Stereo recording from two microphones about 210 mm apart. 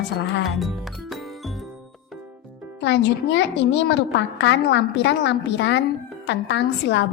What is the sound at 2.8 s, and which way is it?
A woman's voice, 55° left (ahead or behind).